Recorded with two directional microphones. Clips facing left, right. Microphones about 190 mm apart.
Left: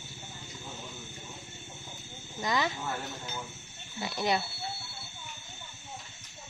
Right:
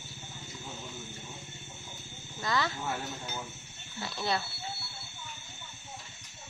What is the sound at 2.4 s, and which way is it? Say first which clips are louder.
Speech: left 1 dB; 15° left (ahead or behind).